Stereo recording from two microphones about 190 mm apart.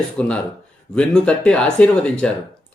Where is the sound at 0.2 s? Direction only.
5° left (ahead or behind).